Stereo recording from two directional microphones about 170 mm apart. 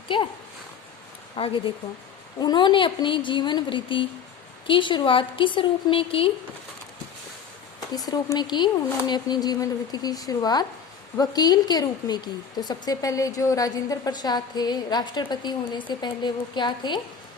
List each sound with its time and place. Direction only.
0.1 s a woman's voice: 30° left (ahead or behind)
1.4 s a woman's voice: 30° left (ahead or behind)
7.9 s a woman's voice: 20° left (ahead or behind)